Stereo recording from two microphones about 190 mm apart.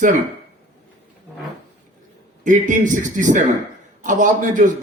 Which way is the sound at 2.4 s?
40° right (ahead or behind).